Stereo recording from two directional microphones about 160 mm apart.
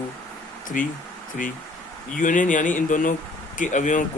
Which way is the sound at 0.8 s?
55° left (ahead or behind).